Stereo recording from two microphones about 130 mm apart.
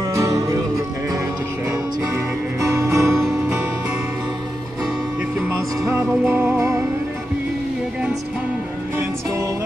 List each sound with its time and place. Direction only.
0.1 s music: 25° right (ahead or behind)
2.6 s music: 20° right (ahead or behind)
3.2 s music: centre (ahead or behind)
5.9 s music: 15° right (ahead or behind)